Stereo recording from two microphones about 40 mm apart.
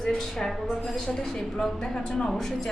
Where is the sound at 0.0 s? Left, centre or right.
Centre.